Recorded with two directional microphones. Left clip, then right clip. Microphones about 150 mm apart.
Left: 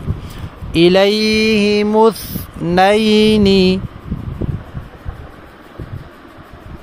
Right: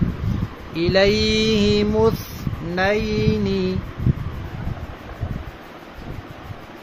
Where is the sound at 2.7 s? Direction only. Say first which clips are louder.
Left 10 dB; 90° left.